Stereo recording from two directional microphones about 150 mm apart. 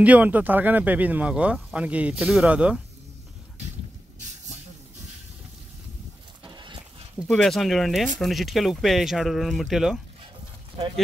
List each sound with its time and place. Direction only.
0.0 s speech: 10° right (ahead or behind)
6.4 s a sound: 30° right (ahead or behind)
7.2 s speech: centre (ahead or behind)